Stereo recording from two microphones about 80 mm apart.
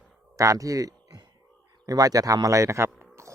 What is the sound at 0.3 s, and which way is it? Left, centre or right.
A man's voice, right.